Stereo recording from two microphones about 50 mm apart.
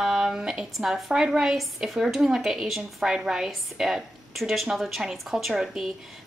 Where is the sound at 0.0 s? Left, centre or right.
Centre.